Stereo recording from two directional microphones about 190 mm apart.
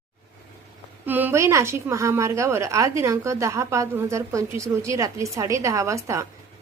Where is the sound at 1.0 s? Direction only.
10° right (ahead or behind).